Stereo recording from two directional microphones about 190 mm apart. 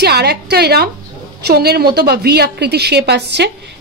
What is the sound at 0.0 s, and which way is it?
A woman's voice, 60° right (ahead or behind).